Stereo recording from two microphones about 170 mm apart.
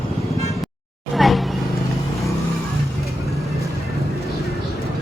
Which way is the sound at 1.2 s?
Centre (ahead or behind).